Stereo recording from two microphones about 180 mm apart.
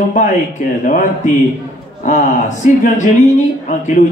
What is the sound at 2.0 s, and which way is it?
A man's voice, 45° left (ahead or behind).